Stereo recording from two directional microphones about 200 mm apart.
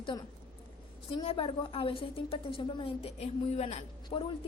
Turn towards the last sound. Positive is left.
turn(degrees=25)  # may be behind; listen again after turning